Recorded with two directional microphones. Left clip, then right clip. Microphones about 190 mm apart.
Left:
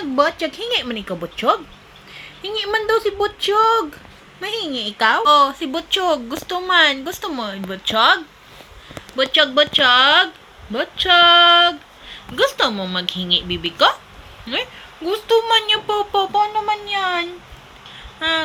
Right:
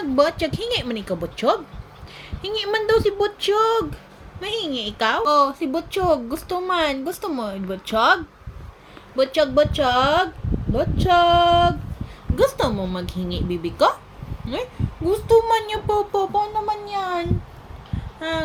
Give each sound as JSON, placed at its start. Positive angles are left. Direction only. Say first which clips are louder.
{"t": 0.0, "sound": "a woman's voice", "louder": "left 1 dB", "side_deg": -15}
{"t": 16.9, "sound": "a woman's voice", "louder": "left 6 dB", "side_deg": 10}